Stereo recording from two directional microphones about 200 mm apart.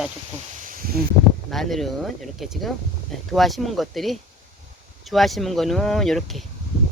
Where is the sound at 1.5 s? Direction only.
Centre (ahead or behind).